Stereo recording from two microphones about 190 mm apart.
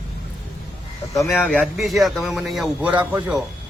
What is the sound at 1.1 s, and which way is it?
Speech, 10° left (ahead or behind).